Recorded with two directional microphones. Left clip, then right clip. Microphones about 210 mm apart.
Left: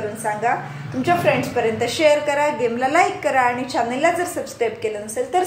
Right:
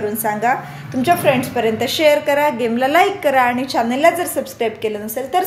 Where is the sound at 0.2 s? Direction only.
45° right (ahead or behind).